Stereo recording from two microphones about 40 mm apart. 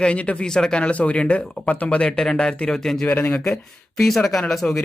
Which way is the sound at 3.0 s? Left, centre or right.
Left.